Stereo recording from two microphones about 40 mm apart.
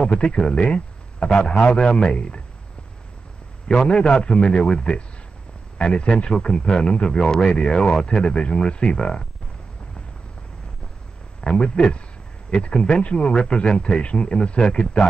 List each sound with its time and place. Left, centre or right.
0.0 s speech: left
3.6 s speech: left
11.4 s speech: left